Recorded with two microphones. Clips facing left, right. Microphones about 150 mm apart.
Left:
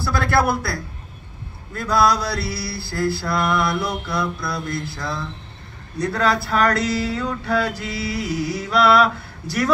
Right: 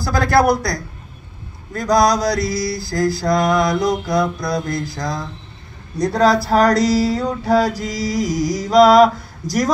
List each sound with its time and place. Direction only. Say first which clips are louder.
0.0 s speech: right 5 dB; 40° right (ahead or behind)